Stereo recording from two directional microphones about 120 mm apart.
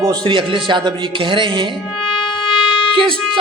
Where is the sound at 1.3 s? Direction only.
40° right (ahead or behind).